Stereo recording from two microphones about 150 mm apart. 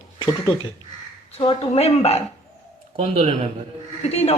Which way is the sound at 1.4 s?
40° left (ahead or behind).